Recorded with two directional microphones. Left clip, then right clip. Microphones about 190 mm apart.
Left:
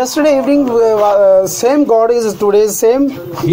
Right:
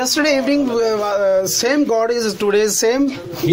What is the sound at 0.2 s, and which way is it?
Speech, 15° right (ahead or behind).